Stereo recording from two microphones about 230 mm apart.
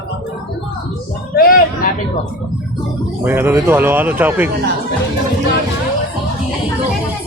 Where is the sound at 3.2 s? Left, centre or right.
Centre.